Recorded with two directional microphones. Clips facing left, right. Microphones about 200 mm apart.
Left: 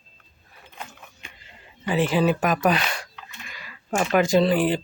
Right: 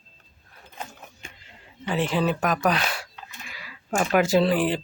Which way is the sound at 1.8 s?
5° left (ahead or behind).